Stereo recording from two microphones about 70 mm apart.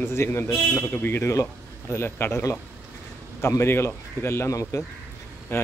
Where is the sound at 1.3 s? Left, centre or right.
Left.